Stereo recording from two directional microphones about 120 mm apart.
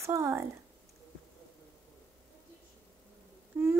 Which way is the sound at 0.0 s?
25° right (ahead or behind).